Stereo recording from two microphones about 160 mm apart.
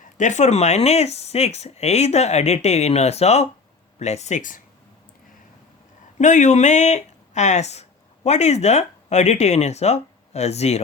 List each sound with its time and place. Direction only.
0.0 s speech: 50° left (ahead or behind)
6.1 s speech: 50° left (ahead or behind)